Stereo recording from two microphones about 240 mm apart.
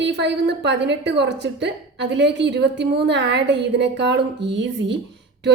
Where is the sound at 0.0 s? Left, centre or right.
Right.